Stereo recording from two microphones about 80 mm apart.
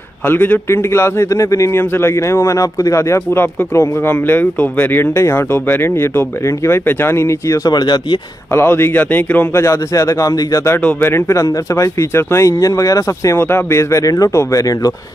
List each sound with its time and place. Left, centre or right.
0.3 s speech: left
8.5 s speech: left
9.6 s speech: left
10.8 s speech: centre
11.1 s speech: left
13.4 s speech: left